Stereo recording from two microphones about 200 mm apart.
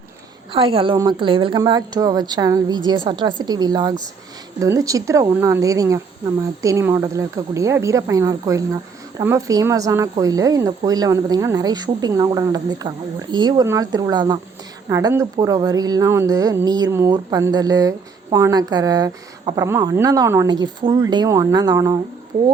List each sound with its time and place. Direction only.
0.5 s a woman's voice: 25° right (ahead or behind)